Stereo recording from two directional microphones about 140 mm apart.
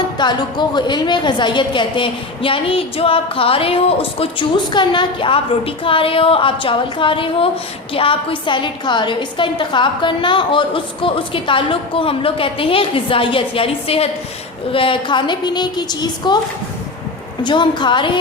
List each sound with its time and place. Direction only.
0.2 s a woman's voice: 30° left (ahead or behind)
17.4 s a woman's voice: 35° left (ahead or behind)